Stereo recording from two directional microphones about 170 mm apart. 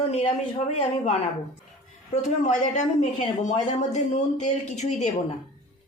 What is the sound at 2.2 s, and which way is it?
Speech, 45° left (ahead or behind).